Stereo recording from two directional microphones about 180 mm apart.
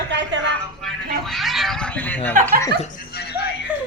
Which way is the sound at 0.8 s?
Centre (ahead or behind).